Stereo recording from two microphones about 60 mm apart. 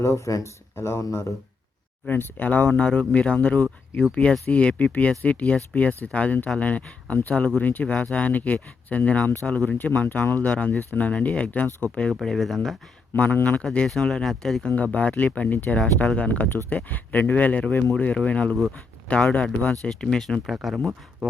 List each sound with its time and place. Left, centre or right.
0.0 s speech: left
0.8 s speech: left
1.0 s speech: left
2.0 s speech: left
12.2 s speech: centre
13.1 s speech: left
13.8 s speech: centre
14.9 s speech: left
20.0 s speech: centre
21.2 s a sound: centre